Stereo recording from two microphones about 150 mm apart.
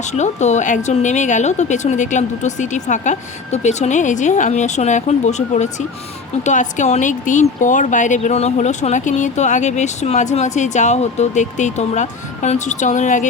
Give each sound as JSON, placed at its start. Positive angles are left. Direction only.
{"t": 0.0, "sound": "speech", "side_deg": 50}